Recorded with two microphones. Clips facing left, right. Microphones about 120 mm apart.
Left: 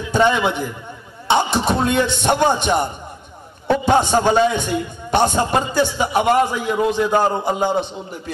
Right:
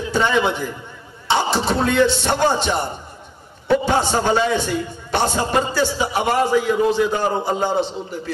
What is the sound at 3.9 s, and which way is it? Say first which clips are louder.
A man's voice: left 3 dB; 20° left (ahead or behind).